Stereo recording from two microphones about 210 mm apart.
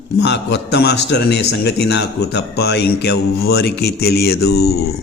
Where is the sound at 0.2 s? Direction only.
55° left (ahead or behind).